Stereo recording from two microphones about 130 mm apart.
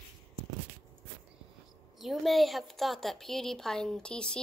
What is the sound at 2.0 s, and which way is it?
A woman's voice, centre (ahead or behind).